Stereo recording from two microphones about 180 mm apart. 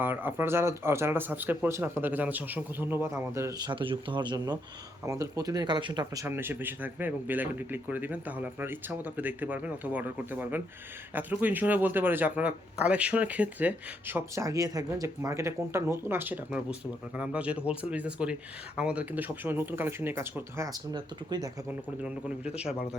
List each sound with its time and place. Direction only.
0.0 s a man's voice: 10° right (ahead or behind)
6.2 s a man's voice: 10° right (ahead or behind)